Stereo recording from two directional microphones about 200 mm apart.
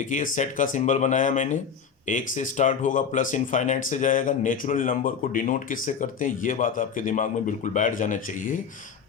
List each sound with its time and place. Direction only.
0.0 s speech: 40° left (ahead or behind)